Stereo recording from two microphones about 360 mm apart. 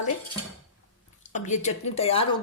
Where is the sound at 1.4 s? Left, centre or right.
Centre.